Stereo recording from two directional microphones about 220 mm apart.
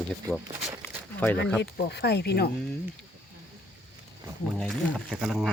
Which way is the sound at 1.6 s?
50° left (ahead or behind).